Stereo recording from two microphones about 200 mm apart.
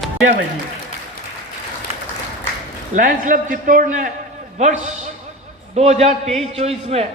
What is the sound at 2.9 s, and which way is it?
A man's voice, 40° right (ahead or behind).